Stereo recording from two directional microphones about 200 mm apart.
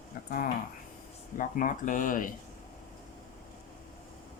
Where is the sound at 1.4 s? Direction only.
40° left (ahead or behind).